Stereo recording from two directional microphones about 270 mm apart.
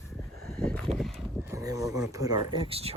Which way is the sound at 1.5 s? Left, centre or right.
Centre.